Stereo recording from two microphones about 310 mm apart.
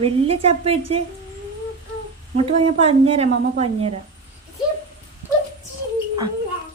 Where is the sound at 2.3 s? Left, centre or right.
Centre.